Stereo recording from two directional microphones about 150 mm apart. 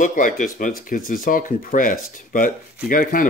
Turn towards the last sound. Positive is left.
turn(degrees=65)  # may be behind; listen again after turning